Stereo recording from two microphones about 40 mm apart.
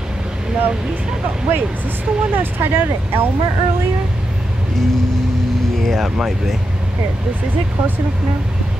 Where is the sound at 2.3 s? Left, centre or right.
Right.